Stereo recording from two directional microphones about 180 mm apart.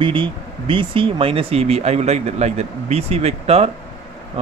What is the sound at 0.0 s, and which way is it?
Speech, 30° right (ahead or behind).